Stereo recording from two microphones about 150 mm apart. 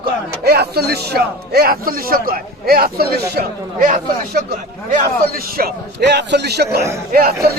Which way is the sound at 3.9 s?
80° right.